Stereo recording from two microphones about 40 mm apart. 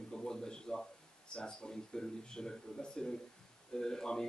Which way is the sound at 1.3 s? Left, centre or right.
Left.